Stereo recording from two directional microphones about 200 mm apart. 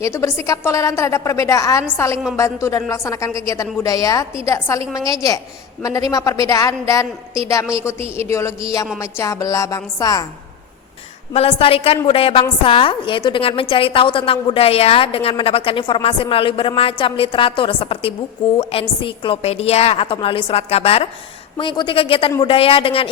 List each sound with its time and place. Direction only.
0.0 s a woman's voice: 15° left (ahead or behind)
11.3 s a woman's voice: 30° left (ahead or behind)